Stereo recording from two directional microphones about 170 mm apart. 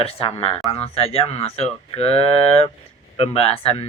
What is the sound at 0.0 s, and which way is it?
Speech, 35° left (ahead or behind).